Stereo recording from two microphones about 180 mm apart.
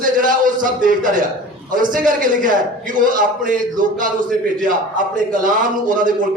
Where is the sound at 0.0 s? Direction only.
50° right (ahead or behind).